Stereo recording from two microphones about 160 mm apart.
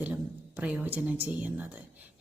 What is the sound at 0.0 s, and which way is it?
A woman's voice, 10° right (ahead or behind).